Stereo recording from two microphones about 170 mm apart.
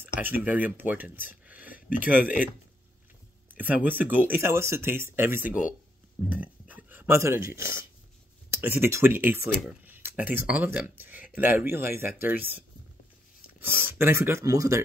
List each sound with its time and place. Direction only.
0.0 s speech: 10° right (ahead or behind)
3.5 s speech: 10° right (ahead or behind)
6.2 s a sound: 10° right (ahead or behind)
7.5 s speech: 15° right (ahead or behind)
9.7 s a sound: 10° right (ahead or behind)
10.2 s speech: 10° right (ahead or behind)